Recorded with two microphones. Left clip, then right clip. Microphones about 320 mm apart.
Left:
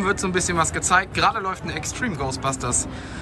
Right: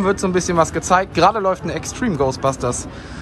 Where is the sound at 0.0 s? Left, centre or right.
Centre.